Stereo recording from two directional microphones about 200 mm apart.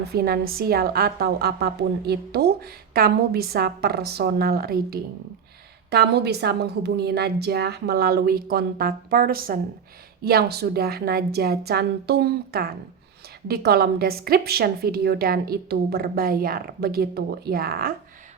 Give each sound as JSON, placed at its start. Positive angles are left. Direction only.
{"t": 0.1, "sound": "a woman's voice", "side_deg": -50}